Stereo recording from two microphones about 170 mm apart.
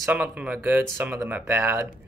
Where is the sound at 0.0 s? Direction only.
10° right (ahead or behind).